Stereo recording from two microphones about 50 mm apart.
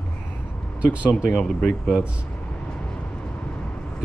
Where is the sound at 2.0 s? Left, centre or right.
Right.